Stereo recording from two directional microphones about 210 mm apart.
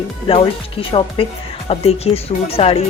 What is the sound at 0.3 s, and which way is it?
A woman's voice, 25° left (ahead or behind).